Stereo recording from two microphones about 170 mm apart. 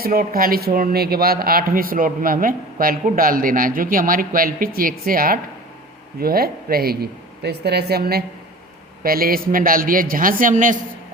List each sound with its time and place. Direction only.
0.0 s speech: 60° right (ahead or behind)
9.0 s speech: 60° right (ahead or behind)